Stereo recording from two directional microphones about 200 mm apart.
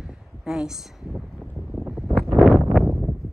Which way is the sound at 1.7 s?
5° right (ahead or behind).